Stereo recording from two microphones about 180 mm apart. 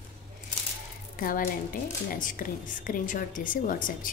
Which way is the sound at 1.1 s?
50° left (ahead or behind).